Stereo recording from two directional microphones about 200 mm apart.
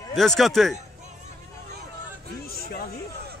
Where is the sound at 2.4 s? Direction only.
50° left (ahead or behind).